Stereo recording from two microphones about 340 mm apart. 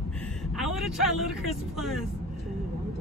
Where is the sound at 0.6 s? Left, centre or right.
Centre.